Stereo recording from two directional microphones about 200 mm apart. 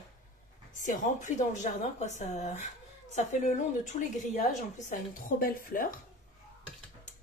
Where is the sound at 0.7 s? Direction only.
40° left (ahead or behind).